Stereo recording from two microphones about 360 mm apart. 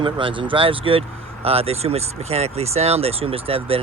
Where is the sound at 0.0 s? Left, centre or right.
Centre.